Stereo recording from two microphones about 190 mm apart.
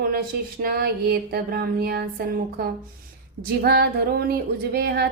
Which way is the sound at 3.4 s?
55° right (ahead or behind).